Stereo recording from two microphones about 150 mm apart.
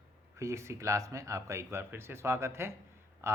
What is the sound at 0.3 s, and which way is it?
Speech, 20° right (ahead or behind).